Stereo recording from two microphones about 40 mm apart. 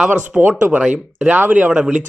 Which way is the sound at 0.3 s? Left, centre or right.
Right.